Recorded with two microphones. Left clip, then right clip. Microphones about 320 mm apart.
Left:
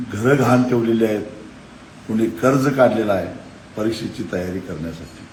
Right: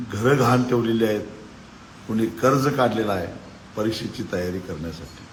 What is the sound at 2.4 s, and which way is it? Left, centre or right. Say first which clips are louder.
Speech: left 4 dB; centre.